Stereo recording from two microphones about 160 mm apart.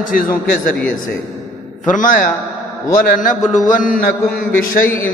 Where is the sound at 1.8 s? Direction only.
55° left (ahead or behind).